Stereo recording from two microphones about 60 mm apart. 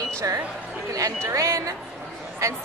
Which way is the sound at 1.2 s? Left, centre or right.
Right.